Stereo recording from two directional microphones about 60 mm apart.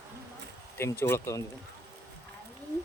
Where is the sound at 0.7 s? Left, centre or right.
Left.